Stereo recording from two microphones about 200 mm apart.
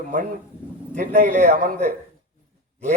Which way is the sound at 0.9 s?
45° right (ahead or behind).